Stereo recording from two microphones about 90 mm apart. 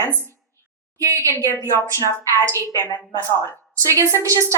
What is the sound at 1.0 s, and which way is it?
Speech, 35° right (ahead or behind).